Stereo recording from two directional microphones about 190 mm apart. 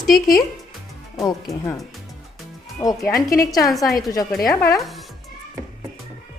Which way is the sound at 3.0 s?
15° left (ahead or behind).